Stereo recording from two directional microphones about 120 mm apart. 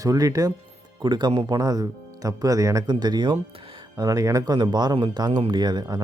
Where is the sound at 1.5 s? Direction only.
30° right (ahead or behind).